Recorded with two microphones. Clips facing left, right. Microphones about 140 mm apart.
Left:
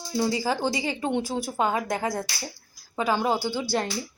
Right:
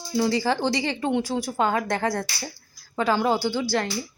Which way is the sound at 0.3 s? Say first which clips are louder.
Right 3 dB; 10° left (ahead or behind).